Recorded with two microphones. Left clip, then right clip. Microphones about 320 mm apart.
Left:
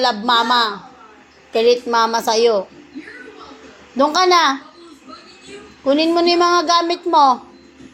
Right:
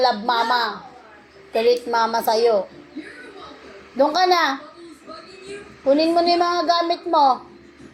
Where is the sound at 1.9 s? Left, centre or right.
Left.